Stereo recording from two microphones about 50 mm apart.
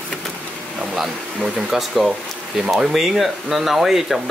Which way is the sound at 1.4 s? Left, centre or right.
Centre.